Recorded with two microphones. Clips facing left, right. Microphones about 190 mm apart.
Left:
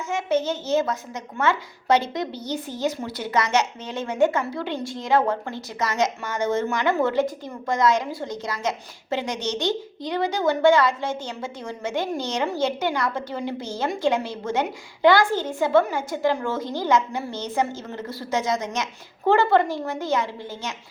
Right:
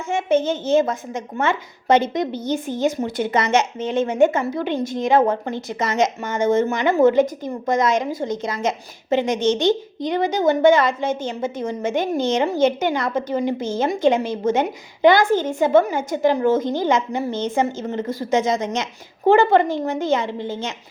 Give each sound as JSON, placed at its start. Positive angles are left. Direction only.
{"t": 0.7, "sound": "a woman's voice", "side_deg": -25}